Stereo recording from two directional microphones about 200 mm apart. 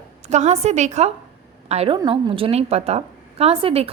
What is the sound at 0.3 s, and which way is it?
A woman's voice, 35° right (ahead or behind).